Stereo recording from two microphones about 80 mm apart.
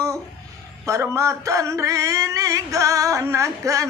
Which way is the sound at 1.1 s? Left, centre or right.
Right.